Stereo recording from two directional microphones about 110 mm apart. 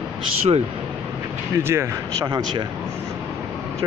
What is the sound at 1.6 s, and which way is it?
Speech, 20° right (ahead or behind).